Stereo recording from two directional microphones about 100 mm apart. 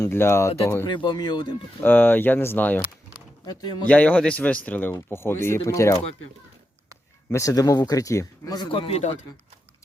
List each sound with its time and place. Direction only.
0.0 s speech: 25° left (ahead or behind)
0.9 s speech: 50° left (ahead or behind)
1.8 s speech: 20° left (ahead or behind)
3.4 s speech: 45° left (ahead or behind)
3.8 s speech: 15° left (ahead or behind); by 6.0 s 30° left (ahead or behind)
7.3 s speech: 35° left (ahead or behind)
8.7 s a man's voice: 75° left (ahead or behind)